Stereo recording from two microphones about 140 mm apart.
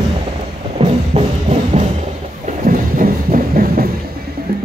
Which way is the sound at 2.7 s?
80° right.